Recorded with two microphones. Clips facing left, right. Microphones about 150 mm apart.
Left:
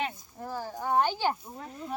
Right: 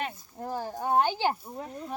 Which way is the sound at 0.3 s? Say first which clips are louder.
Right 4 dB; 20° right (ahead or behind).